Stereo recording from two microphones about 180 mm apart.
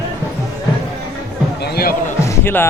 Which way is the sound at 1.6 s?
60° left (ahead or behind).